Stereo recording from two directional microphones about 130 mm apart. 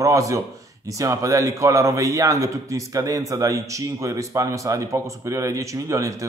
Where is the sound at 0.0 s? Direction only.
25° right (ahead or behind).